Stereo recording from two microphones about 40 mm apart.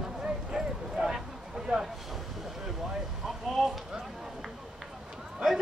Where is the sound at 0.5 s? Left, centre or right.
Centre.